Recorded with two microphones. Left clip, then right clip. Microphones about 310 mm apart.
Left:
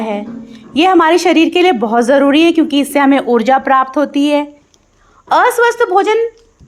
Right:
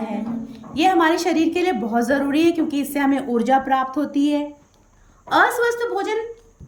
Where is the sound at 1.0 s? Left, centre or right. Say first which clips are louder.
Left 9 dB; centre.